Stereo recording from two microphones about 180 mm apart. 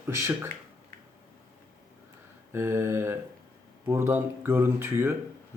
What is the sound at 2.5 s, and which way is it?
Speech, 15° right (ahead or behind).